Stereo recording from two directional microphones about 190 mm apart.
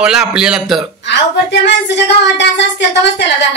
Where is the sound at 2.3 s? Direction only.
70° left (ahead or behind).